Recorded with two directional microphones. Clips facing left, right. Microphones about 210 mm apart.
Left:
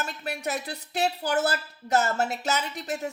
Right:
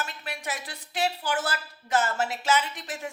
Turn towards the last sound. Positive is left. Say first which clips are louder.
# left 2 dB
turn(degrees=40)  # may be behind; listen again after turning